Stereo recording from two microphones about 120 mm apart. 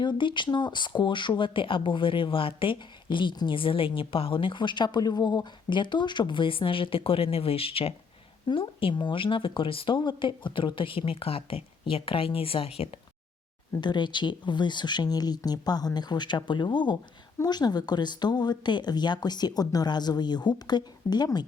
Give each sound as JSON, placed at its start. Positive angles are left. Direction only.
{"t": 0.0, "sound": "speech", "side_deg": 40}
{"t": 13.8, "sound": "speech", "side_deg": 40}